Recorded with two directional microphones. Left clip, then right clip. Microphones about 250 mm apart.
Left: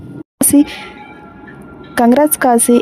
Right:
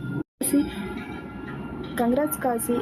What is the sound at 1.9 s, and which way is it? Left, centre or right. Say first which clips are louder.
Speech: left 13 dB; left.